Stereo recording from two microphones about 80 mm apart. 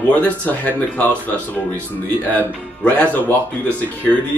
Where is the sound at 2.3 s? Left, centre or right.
Left.